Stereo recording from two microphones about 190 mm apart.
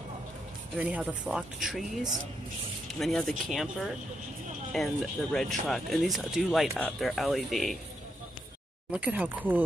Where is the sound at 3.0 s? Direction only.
Centre (ahead or behind).